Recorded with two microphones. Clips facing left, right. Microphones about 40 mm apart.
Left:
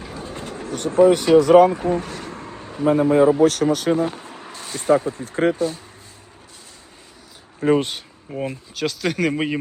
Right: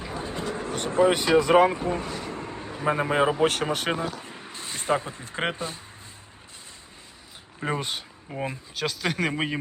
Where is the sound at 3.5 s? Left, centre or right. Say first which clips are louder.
Left 7 dB; right.